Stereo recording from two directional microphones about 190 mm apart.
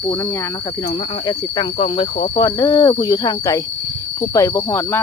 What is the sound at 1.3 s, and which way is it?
Speech, 25° left (ahead or behind).